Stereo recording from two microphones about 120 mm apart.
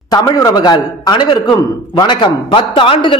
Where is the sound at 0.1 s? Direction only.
30° left (ahead or behind).